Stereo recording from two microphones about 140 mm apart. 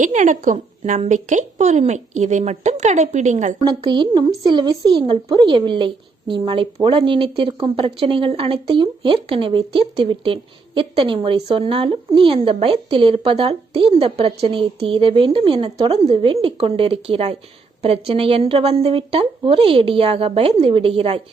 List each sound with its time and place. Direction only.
0.0 s a woman's voice: 60° right (ahead or behind)
3.6 s speech: 30° right (ahead or behind)